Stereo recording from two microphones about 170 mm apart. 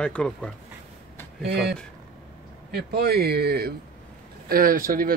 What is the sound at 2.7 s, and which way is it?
Speech, 70° right (ahead or behind).